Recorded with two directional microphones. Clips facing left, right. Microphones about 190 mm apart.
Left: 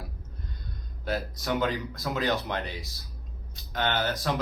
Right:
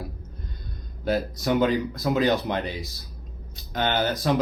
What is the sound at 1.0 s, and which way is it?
Speech, 15° right (ahead or behind).